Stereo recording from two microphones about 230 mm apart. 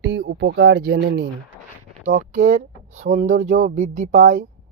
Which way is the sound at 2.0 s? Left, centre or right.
Right.